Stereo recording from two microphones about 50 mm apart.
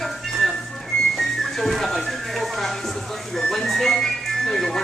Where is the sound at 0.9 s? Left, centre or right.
Centre.